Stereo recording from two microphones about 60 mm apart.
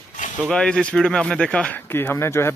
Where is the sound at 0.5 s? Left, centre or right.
Centre.